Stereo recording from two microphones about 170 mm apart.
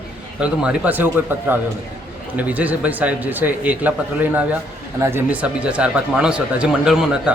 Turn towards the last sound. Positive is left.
turn(degrees=-5)  # may be behind; listen again after turning